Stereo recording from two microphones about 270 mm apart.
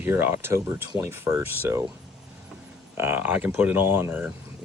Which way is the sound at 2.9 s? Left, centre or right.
Centre.